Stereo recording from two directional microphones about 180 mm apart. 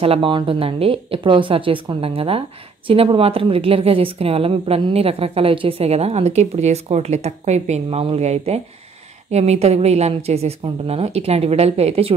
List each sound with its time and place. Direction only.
0.0 s a woman's voice: 30° right (ahead or behind)